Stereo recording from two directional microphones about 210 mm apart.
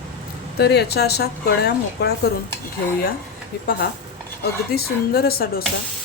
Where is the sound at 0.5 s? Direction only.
50° left (ahead or behind).